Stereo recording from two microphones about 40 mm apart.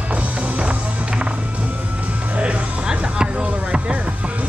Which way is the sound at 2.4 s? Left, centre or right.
Right.